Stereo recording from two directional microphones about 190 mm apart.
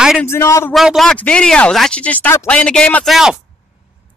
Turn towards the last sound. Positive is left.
turn(degrees=0)  # may be behind; listen again after turning